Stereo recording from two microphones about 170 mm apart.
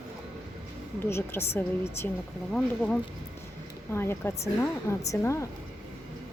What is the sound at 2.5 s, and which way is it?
Speech, 5° left (ahead or behind).